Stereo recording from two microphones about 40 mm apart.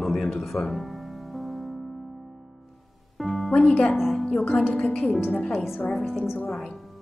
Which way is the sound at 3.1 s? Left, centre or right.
Centre.